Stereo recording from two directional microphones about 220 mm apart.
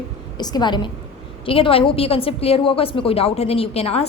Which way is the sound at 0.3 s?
20° left (ahead or behind).